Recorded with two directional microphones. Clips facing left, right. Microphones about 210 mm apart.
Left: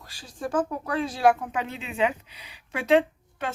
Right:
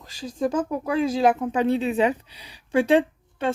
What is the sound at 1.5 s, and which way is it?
Speech, 35° right (ahead or behind).